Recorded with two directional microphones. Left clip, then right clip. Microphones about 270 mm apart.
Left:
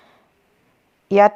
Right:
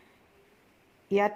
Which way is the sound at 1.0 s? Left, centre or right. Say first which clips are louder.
Left 13 dB; left.